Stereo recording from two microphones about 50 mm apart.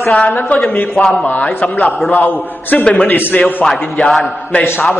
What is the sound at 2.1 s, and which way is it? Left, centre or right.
Speech, left.